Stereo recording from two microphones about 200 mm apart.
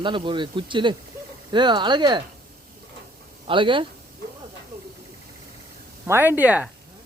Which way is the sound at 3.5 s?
25° right (ahead or behind).